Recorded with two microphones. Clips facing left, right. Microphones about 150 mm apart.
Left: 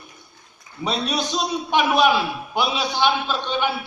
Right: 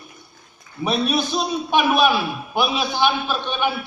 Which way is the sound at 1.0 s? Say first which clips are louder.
Right 3 dB; 20° left (ahead or behind).